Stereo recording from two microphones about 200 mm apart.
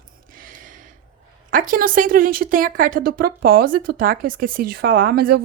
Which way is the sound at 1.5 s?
40° right (ahead or behind).